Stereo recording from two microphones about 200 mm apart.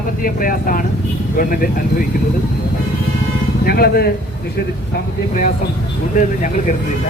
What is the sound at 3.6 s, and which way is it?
Speech, 50° left (ahead or behind).